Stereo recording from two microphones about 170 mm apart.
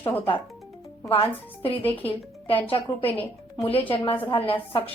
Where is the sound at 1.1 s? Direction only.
35° left (ahead or behind).